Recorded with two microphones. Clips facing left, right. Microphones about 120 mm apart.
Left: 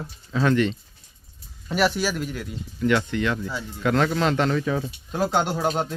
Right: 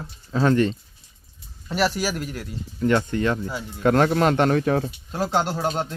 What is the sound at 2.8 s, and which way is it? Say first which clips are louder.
Speech: right 1 dB; 35° right (ahead or behind).